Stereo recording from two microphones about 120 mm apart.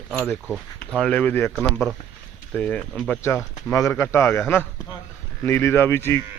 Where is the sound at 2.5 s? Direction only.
10° left (ahead or behind).